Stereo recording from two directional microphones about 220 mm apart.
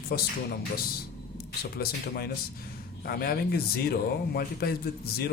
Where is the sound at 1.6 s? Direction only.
45° left (ahead or behind).